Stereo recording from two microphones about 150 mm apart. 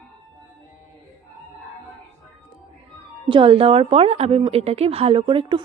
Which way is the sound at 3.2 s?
35° right (ahead or behind).